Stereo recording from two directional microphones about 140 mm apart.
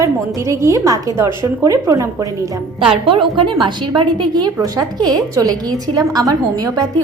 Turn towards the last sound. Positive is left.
turn(degrees=-25)  # may be behind; listen again after turning